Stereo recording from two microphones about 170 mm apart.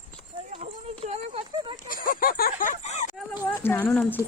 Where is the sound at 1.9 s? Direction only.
55° left (ahead or behind).